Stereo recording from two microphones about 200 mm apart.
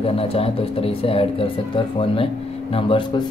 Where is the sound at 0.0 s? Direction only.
30° left (ahead or behind).